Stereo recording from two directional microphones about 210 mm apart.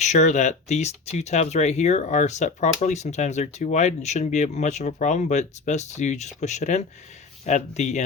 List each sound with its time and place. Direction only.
0.0 s speech: 35° left (ahead or behind)